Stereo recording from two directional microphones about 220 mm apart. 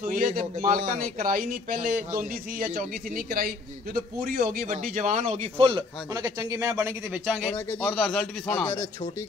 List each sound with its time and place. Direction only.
0.0 s a man's voice: 40° right (ahead or behind); by 8.8 s 10° left (ahead or behind)